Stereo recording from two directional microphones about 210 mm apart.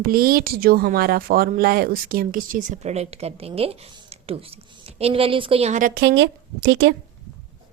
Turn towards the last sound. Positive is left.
turn(degrees=-55)  # may be behind; listen again after turning